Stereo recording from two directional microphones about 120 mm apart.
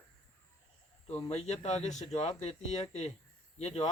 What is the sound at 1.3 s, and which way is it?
Speech, 65° left (ahead or behind).